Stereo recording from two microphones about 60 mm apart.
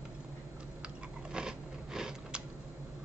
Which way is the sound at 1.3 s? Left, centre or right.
Centre.